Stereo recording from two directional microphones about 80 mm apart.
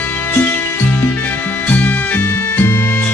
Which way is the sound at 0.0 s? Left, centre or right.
Left.